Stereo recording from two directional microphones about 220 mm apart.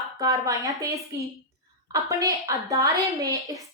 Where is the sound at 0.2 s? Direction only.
15° right (ahead or behind).